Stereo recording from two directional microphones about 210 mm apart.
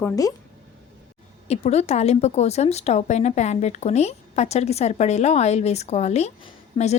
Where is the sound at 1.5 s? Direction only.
30° left (ahead or behind).